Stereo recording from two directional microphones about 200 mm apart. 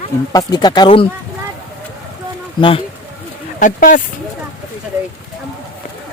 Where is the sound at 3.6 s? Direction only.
40° left (ahead or behind).